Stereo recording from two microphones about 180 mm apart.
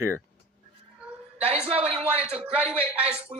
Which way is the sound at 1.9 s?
30° right (ahead or behind).